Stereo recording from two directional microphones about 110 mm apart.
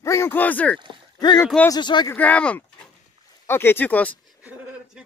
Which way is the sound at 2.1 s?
15° left (ahead or behind).